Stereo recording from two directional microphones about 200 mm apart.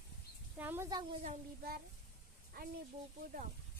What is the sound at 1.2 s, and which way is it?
Child singing, 50° right (ahead or behind).